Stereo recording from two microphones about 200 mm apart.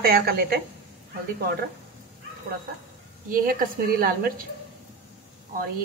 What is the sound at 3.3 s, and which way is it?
A woman's voice, 45° right (ahead or behind).